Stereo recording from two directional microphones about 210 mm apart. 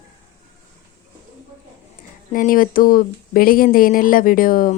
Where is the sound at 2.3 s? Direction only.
40° left (ahead or behind).